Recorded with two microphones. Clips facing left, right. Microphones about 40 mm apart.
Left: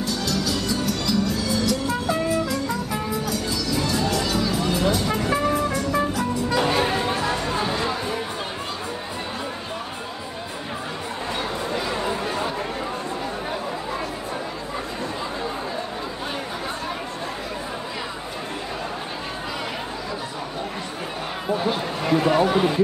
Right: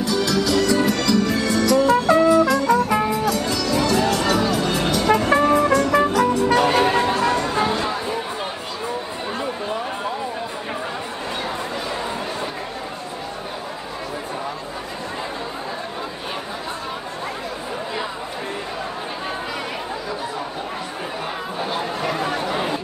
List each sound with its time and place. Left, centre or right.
0.1 s music: right
7.5 s music: right
7.8 s music: centre
21.5 s a sound: centre